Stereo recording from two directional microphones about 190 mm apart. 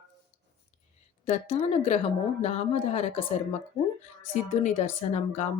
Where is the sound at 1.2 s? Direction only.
30° left (ahead or behind).